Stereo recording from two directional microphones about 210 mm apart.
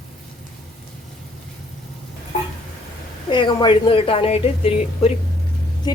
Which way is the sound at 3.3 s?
20° left (ahead or behind).